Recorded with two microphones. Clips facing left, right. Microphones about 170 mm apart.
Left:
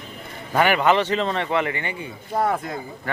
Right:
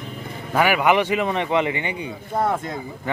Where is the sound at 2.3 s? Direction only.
Centre (ahead or behind).